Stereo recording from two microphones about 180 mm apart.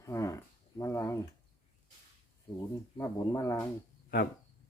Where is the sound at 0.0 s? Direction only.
15° left (ahead or behind).